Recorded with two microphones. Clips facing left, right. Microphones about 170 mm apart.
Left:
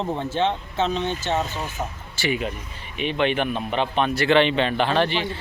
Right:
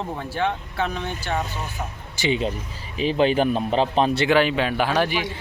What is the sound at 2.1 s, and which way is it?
Speech, 20° right (ahead or behind).